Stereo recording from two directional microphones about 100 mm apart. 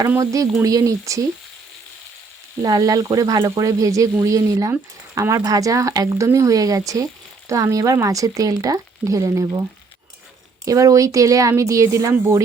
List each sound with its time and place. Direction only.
0.2 s speech: 30° right (ahead or behind)
2.6 s speech: 40° right (ahead or behind)
10.7 s speech: 35° right (ahead or behind)